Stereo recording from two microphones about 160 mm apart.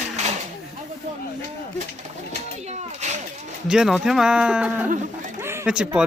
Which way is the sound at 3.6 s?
5° right (ahead or behind).